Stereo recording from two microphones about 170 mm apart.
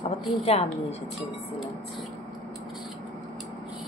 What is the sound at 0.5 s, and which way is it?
Speech, 40° left (ahead or behind).